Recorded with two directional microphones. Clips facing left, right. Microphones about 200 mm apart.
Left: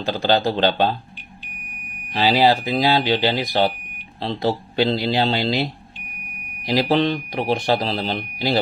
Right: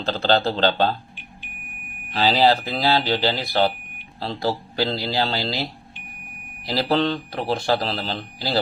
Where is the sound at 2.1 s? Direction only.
15° left (ahead or behind).